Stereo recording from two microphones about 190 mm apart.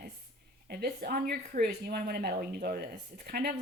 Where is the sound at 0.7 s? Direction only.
55° right (ahead or behind).